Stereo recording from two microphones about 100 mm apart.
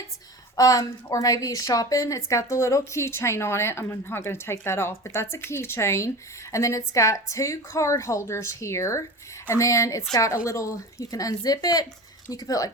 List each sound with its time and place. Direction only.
0.5 s a woman's voice: 35° left (ahead or behind)